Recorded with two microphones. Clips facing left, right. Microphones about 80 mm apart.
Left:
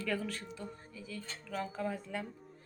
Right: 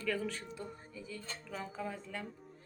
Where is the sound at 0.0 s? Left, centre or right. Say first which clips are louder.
Even; centre.